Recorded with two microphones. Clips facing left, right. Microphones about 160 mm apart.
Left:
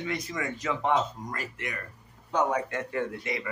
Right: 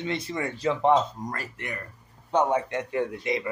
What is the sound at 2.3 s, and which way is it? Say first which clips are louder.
A man's voice: right 3 dB; 25° right (ahead or behind).